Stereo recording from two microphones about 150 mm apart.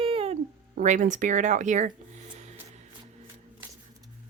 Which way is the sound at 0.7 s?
60° right (ahead or behind).